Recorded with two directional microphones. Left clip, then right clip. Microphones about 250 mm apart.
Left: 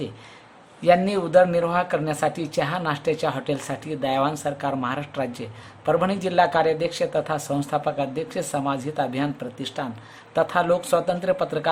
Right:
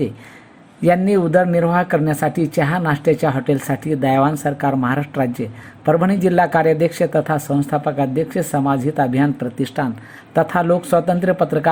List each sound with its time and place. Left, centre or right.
0.9 s speech: centre